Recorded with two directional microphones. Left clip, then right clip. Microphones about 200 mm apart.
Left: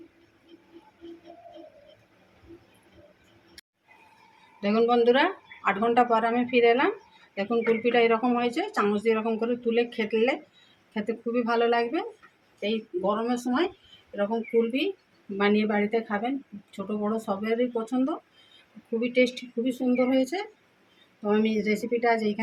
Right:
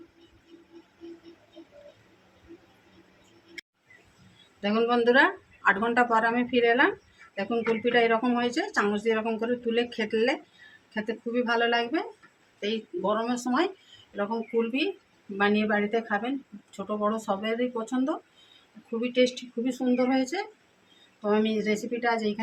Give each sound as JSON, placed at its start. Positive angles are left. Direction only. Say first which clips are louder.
{"t": 4.6, "sound": "speech", "louder": "left 2 dB", "side_deg": -10}
{"t": 10.9, "sound": "speech", "louder": "left 1 dB", "side_deg": -10}
{"t": 14.2, "sound": "speech", "louder": "left 3 dB", "side_deg": -10}